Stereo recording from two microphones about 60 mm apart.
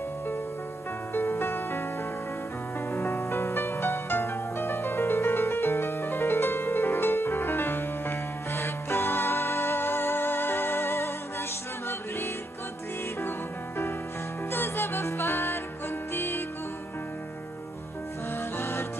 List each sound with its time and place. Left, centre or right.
1.1 s music: left
2.9 s music: left
14.5 s music: left
18.6 s music: left